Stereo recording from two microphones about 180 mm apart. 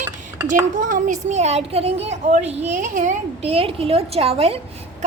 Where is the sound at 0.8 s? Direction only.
45° right (ahead or behind).